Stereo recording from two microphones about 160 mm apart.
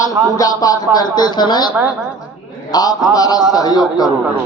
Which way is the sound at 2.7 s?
25° left (ahead or behind).